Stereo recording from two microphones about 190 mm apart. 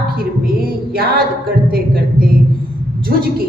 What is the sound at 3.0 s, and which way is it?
Speech, 50° right (ahead or behind).